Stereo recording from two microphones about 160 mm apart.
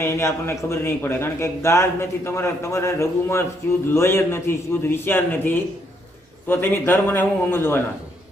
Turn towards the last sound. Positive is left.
turn(degrees=15)  # may be behind; listen again after turning